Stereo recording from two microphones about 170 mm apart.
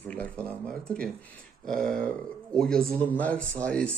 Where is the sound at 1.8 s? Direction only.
50° right (ahead or behind).